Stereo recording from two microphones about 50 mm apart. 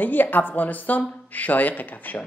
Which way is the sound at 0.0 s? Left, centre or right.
Left.